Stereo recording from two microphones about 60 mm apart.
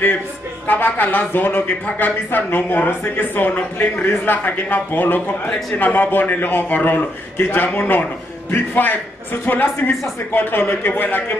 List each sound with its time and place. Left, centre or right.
0.7 s speech: left